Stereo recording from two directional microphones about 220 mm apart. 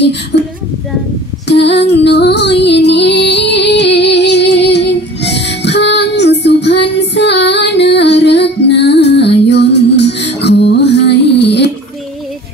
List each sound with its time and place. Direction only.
0.3 s speech: 50° left (ahead or behind)
1.5 s music: 50° left (ahead or behind)